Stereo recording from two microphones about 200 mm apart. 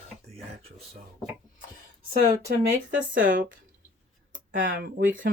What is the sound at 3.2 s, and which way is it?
Speech, 40° right (ahead or behind).